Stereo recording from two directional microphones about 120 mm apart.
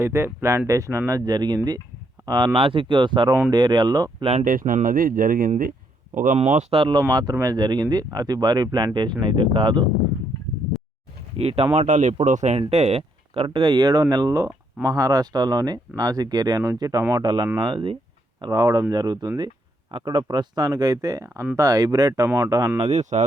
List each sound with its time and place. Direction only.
0.0 s speech: 20° right (ahead or behind)
2.6 s speech: 50° right (ahead or behind)
4.2 s speech: 60° right (ahead or behind); by 4.9 s 90° right
6.1 s speech: 80° right
6.7 s speech: 40° right (ahead or behind)
11.3 s speech: 55° right (ahead or behind); by 17.0 s 30° right (ahead or behind)
17.0 s speech: 20° right (ahead or behind)
17.2 s speech: 40° right (ahead or behind)
18.3 s speech: 30° right (ahead or behind)
22.8 s speech: 70° right (ahead or behind)